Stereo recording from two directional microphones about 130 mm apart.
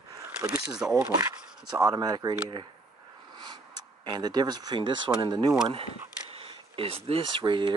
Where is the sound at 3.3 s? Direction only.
35° right (ahead or behind).